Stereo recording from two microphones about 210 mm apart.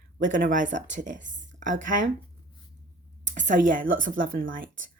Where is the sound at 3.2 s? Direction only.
35° right (ahead or behind).